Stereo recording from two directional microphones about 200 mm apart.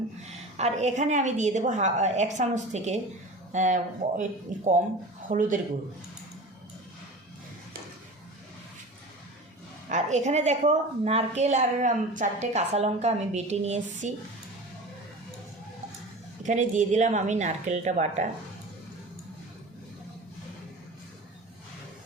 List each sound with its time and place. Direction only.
0.5 s a woman's voice: 35° right (ahead or behind)
9.9 s a woman's voice: 35° right (ahead or behind)
16.4 s a woman's voice: 35° right (ahead or behind)